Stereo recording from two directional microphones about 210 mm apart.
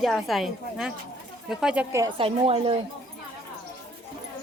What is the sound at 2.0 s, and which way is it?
Speech, 25° right (ahead or behind).